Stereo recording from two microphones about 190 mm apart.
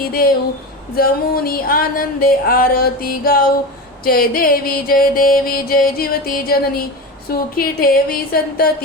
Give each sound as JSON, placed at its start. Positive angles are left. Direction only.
{"t": 0.0, "sound": "music", "side_deg": 50}